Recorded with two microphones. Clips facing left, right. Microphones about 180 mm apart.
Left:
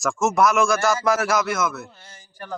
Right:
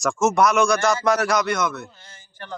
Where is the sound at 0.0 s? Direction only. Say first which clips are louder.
Right 1 dB; centre (ahead or behind).